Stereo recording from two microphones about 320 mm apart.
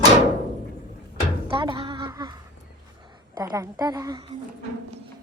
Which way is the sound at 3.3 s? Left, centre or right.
Centre.